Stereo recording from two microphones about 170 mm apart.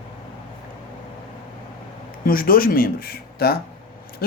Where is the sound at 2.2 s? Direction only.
55° left (ahead or behind).